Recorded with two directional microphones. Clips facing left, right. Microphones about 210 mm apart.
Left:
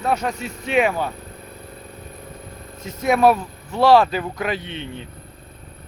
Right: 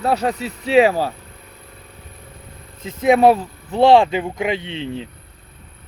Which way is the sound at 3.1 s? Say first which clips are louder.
Right 1 dB; 25° right (ahead or behind).